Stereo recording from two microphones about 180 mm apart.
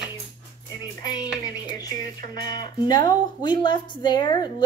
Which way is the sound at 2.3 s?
25° left (ahead or behind).